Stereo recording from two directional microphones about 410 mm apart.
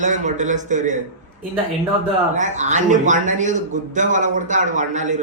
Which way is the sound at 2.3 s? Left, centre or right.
Centre.